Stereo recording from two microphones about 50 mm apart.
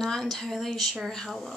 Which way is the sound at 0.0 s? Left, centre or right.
Centre.